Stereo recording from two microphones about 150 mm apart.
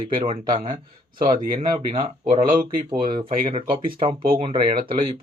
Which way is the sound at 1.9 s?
40° right (ahead or behind).